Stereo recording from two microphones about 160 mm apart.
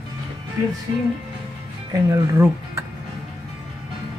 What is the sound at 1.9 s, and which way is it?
Speech, 20° right (ahead or behind).